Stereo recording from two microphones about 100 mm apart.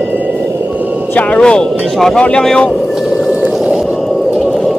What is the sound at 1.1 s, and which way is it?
Speech, 15° left (ahead or behind).